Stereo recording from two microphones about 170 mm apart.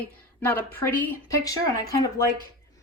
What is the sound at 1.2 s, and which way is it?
Speech, 20° left (ahead or behind).